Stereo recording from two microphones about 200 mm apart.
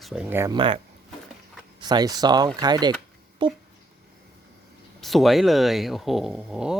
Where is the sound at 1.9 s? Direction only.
20° right (ahead or behind).